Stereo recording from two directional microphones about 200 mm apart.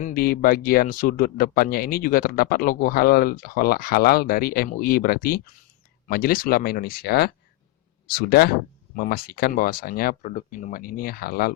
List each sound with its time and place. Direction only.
0.0 s speech: 45° left (ahead or behind)